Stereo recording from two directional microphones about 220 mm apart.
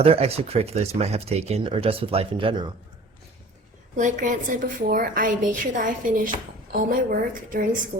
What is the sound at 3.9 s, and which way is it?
A woman's voice, 35° right (ahead or behind).